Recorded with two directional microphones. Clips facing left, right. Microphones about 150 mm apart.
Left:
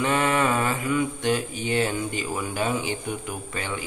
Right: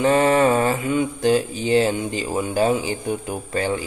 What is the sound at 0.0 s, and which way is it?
Mantra, 35° right (ahead or behind).